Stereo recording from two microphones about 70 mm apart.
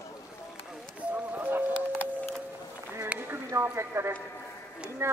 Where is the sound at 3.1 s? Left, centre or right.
Right.